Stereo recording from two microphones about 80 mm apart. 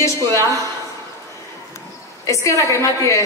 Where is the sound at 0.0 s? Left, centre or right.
Left.